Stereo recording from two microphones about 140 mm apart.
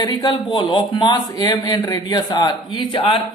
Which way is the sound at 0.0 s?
30° left (ahead or behind).